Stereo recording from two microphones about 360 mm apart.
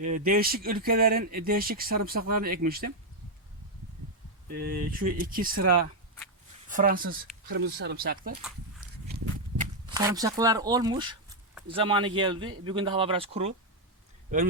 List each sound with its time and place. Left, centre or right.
0.3 s speech: right
4.6 s speech: right
9.9 s speech: centre